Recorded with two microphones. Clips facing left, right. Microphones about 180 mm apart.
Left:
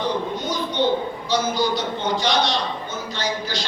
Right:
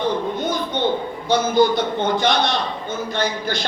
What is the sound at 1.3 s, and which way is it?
A man's voice, 55° right (ahead or behind).